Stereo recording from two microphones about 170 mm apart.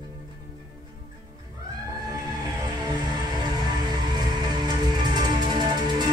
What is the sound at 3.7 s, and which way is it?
Music, 25° right (ahead or behind).